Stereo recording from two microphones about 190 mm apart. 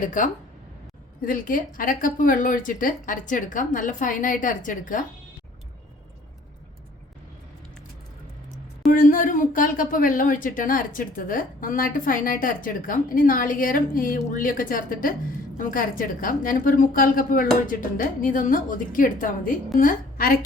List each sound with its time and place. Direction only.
0.0 s speech: 45° left (ahead or behind)
8.9 s speech: 45° left (ahead or behind)